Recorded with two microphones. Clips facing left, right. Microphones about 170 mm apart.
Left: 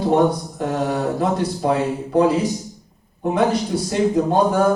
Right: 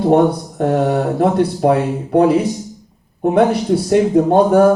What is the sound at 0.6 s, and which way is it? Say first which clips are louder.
Speech: right 6 dB; 55° right (ahead or behind).